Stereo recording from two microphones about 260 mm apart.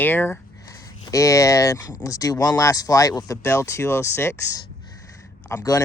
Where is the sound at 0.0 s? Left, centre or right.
Centre.